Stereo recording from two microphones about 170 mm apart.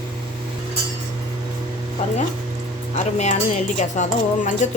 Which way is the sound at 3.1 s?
45° left (ahead or behind).